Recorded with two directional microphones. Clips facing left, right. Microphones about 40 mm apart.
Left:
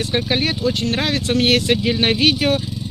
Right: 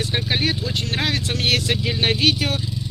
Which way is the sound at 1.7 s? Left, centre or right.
Left.